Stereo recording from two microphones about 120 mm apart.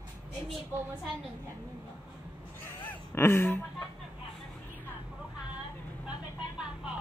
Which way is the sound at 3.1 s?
20° left (ahead or behind).